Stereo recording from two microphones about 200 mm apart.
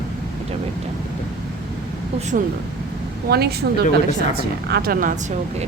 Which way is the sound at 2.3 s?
45° right (ahead or behind).